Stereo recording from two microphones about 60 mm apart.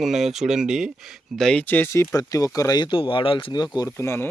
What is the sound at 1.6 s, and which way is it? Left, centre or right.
Speech, left.